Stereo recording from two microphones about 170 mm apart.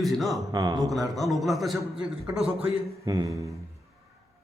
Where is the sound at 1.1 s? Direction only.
Centre (ahead or behind).